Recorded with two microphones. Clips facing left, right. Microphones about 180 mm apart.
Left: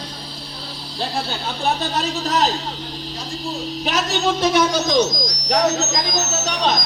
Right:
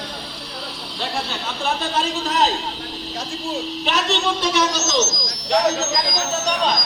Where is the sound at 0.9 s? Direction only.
35° left (ahead or behind).